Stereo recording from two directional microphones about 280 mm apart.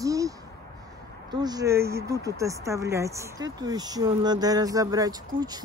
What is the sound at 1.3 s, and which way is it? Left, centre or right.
Speech, centre.